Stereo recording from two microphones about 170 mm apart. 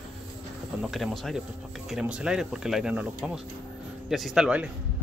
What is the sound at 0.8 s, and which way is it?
Speech, centre (ahead or behind).